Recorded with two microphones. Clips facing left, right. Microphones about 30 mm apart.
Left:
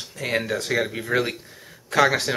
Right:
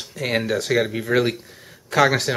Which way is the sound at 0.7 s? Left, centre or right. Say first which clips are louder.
Right 3 dB; centre.